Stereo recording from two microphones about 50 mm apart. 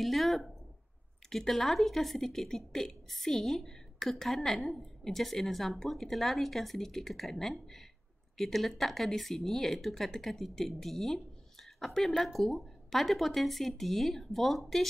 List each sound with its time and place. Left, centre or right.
0.0 s a woman's voice: centre